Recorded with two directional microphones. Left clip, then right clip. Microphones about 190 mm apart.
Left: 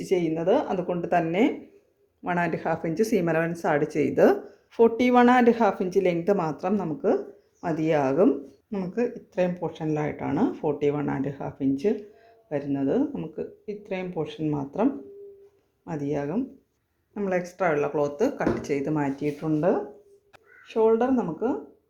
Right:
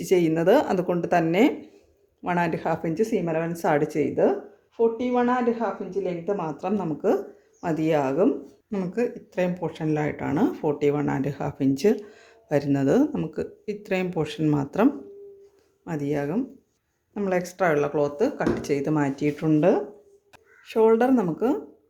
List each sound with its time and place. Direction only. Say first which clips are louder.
0.0 s speech: right 4 dB; 15° right (ahead or behind); by 3.5 s 10° left (ahead or behind)
3.5 s speech: right 2 dB; 5° right (ahead or behind)
4.1 s speech: left 4 dB; 15° left (ahead or behind)
4.8 s speech: left 4 dB; 40° left (ahead or behind); by 8.3 s 5° left (ahead or behind)
8.7 s speech: right 1 dB; 5° right (ahead or behind)
15.8 s speech: right 2 dB; 5° right (ahead or behind); by 21.6 s 20° right (ahead or behind)